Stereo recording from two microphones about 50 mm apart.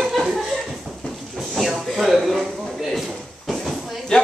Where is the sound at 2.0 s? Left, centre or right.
Centre.